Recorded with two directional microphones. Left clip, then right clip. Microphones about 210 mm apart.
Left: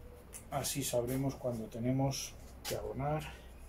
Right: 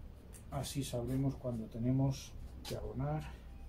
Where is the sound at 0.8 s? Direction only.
10° right (ahead or behind).